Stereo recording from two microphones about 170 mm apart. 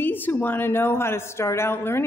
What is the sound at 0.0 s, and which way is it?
A woman's voice, 10° left (ahead or behind).